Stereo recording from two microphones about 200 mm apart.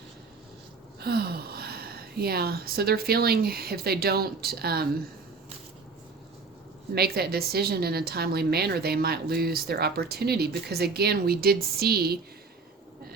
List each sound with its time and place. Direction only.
0.9 s speech: 50° right (ahead or behind)
6.9 s a woman's voice: 50° right (ahead or behind)